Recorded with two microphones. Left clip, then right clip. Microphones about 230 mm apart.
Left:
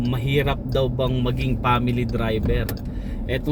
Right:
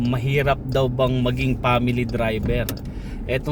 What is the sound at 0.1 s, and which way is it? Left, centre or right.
Speech, centre.